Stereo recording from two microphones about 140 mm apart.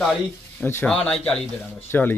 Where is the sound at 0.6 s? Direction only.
15° left (ahead or behind).